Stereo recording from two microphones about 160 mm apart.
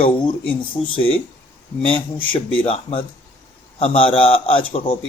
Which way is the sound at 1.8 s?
35° left (ahead or behind).